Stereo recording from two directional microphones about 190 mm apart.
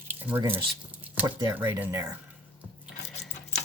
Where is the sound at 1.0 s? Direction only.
10° right (ahead or behind).